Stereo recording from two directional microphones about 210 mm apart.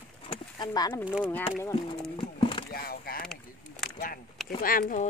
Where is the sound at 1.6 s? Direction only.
20° left (ahead or behind).